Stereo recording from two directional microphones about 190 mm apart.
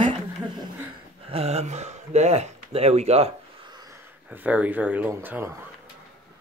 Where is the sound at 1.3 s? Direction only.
35° right (ahead or behind).